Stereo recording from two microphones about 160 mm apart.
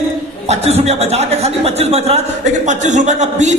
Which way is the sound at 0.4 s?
40° right (ahead or behind).